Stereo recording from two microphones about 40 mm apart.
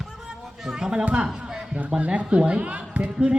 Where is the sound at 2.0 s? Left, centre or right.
Right.